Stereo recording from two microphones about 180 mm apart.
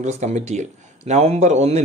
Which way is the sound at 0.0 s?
40° right (ahead or behind).